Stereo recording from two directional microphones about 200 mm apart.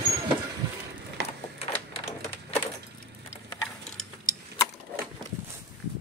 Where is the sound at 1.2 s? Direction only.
55° right (ahead or behind).